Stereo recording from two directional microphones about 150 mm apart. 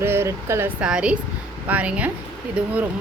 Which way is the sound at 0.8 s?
5° right (ahead or behind).